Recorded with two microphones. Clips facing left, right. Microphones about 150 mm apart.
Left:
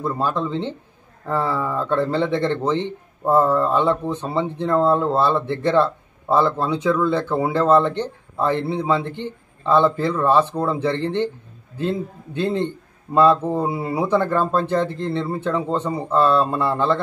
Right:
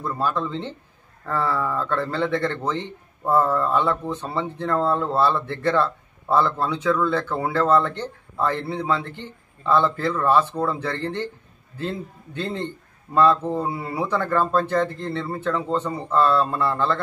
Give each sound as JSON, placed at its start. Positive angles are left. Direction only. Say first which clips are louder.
{"t": 0.0, "sound": "a man's voice", "louder": "left 2 dB", "side_deg": 20}